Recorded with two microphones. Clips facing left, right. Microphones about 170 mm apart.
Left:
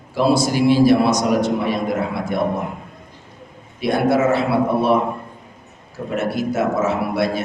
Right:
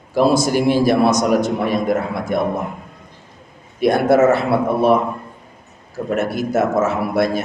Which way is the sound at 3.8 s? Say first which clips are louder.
Right 4 dB; 45° right (ahead or behind).